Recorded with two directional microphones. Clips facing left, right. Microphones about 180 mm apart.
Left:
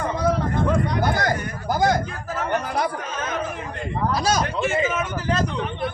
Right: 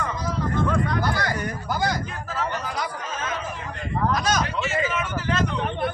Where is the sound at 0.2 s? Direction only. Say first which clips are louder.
Left 7 dB; 60° left (ahead or behind).